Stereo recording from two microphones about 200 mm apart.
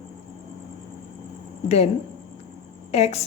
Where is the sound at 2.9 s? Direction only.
35° left (ahead or behind).